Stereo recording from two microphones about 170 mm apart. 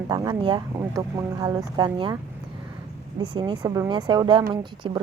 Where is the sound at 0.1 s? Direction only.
25° right (ahead or behind).